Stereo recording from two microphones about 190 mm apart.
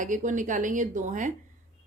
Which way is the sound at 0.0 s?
40° right (ahead or behind).